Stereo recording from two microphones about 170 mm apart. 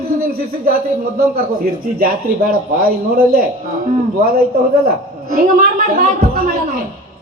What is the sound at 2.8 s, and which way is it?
A man's voice, 60° right (ahead or behind).